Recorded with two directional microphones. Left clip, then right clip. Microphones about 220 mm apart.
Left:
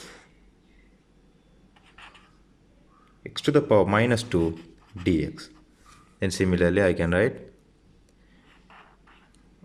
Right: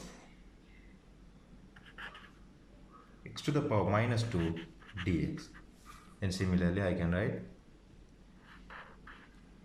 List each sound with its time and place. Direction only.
3.3 s speech: 40° left (ahead or behind)